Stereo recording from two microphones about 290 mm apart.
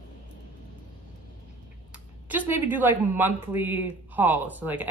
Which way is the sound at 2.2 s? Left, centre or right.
Centre.